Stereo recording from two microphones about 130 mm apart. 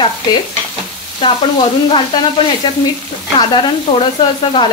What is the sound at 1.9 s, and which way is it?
Sizzle, 35° left (ahead or behind).